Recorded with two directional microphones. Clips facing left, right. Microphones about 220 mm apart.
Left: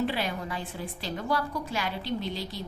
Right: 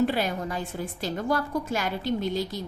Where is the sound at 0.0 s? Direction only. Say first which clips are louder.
Right 5 dB; 45° right (ahead or behind).